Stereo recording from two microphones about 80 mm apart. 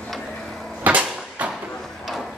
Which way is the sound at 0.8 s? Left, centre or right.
Centre.